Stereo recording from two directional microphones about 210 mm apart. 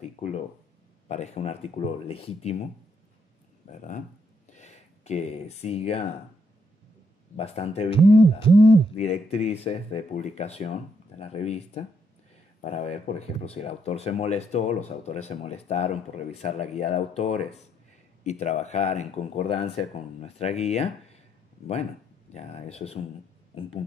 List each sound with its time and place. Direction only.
1.0 s speech: 35° left (ahead or behind)
4.5 s a sound: 35° left (ahead or behind)
7.3 s speech: 30° left (ahead or behind)
22.3 s speech: 30° left (ahead or behind)